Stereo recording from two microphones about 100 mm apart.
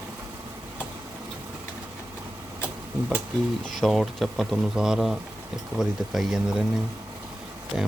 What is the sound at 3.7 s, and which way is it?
Speech, centre (ahead or behind).